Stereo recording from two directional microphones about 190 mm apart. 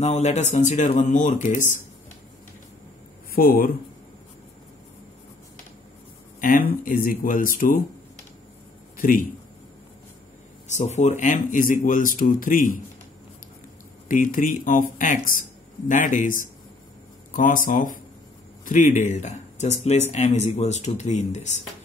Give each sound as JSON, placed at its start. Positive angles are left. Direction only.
{"t": 0.0, "sound": "speech", "side_deg": 35}
{"t": 3.3, "sound": "speech", "side_deg": 50}
{"t": 6.4, "sound": "speech", "side_deg": 45}
{"t": 8.9, "sound": "a sound", "side_deg": 50}
{"t": 10.7, "sound": "speech", "side_deg": 35}
{"t": 14.0, "sound": "speech", "side_deg": 45}